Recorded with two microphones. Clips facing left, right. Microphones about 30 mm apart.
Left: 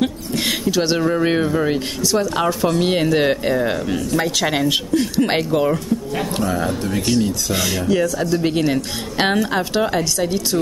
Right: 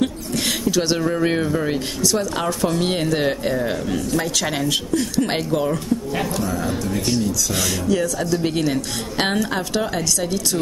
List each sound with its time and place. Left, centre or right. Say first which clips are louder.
0.5 s speech: left 2 dB; centre
6.5 s speech: left 2 dB; left
7.5 s speech: left 3 dB; centre